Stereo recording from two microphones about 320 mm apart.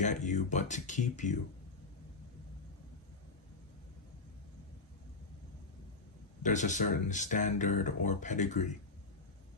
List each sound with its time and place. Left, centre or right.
0.0 s speech: left
6.4 s speech: left